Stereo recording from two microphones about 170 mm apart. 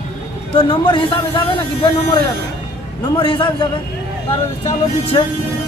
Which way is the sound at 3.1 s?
30° left (ahead or behind).